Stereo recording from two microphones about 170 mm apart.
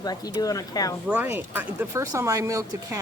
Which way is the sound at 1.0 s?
10° right (ahead or behind).